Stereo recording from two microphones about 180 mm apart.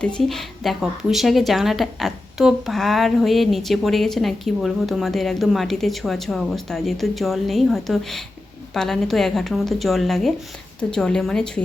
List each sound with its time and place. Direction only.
0.0 s a woman's voice: centre (ahead or behind)